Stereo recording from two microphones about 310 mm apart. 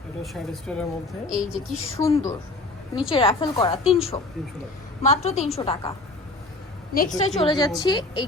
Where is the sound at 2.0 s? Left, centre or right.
Centre.